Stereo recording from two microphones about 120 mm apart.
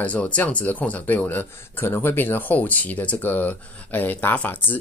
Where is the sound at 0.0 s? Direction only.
10° left (ahead or behind).